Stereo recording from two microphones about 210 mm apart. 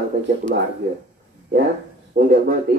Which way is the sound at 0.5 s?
45° right (ahead or behind).